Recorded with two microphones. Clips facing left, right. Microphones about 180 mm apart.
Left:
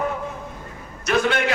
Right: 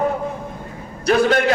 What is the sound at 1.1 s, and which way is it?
Speech, 35° right (ahead or behind).